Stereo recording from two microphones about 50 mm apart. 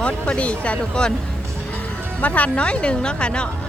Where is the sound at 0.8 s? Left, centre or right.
Centre.